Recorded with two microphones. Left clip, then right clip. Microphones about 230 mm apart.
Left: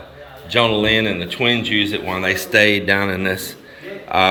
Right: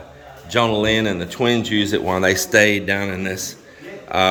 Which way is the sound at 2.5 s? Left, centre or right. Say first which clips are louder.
Left 3 dB; centre.